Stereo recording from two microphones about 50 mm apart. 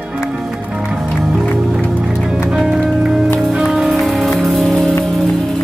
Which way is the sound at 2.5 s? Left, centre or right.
Centre.